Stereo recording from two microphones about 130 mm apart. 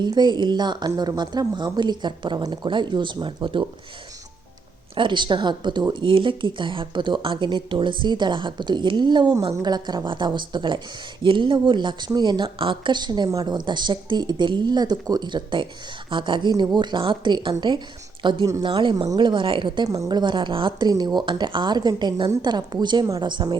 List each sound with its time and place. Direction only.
0.0 s speech: 35° right (ahead or behind)
4.9 s speech: 35° right (ahead or behind)